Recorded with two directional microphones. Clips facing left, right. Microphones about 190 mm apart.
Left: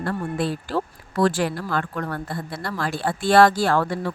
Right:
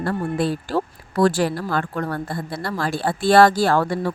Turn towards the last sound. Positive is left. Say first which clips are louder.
# right 2 dB
turn(degrees=-35)  # may be behind; listen again after turning